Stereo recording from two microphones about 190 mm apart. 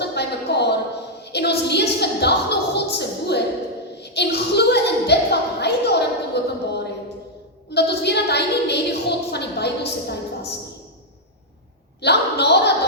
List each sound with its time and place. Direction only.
0.0 s a sound: 60° left (ahead or behind)
4.0 s a woman's voice: 60° left (ahead or behind)
12.0 s a woman's voice: 60° left (ahead or behind)